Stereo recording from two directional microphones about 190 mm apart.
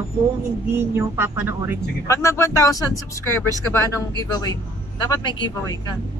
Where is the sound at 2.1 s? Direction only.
15° left (ahead or behind).